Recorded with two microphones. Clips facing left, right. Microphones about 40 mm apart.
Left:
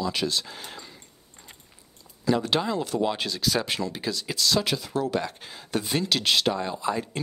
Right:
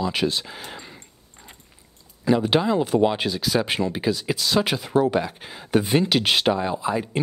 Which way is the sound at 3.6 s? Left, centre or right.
Right.